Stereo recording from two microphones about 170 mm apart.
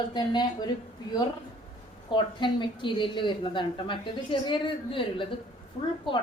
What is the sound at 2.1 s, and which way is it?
A woman's voice, 30° left (ahead or behind).